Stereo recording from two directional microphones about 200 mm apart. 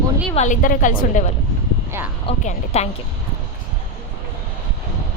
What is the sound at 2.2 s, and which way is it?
Speech, 30° left (ahead or behind).